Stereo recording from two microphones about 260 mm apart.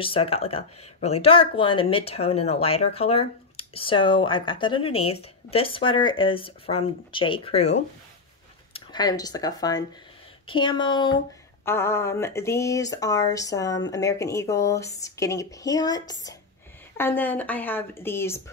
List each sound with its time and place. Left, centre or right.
0.0 s speech: left
8.7 s speech: centre